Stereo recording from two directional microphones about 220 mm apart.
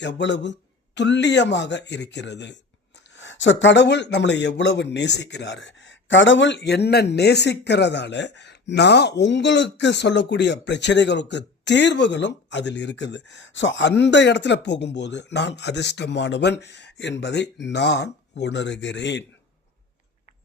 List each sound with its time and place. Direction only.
0.0 s speech: 55° left (ahead or behind)